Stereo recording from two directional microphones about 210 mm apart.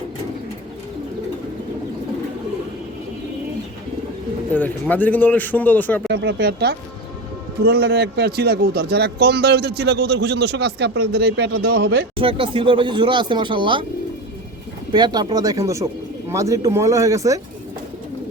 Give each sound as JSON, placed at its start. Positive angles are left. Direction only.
{"t": 4.5, "sound": "speech", "side_deg": 10}
{"t": 6.1, "sound": "speech", "side_deg": -50}
{"t": 12.1, "sound": "speech", "side_deg": -25}
{"t": 14.9, "sound": "speech", "side_deg": -20}